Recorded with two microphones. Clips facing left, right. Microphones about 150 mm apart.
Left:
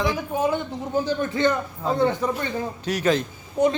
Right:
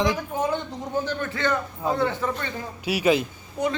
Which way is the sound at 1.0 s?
15° left (ahead or behind).